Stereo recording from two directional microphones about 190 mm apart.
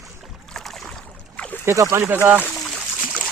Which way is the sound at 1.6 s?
15° right (ahead or behind).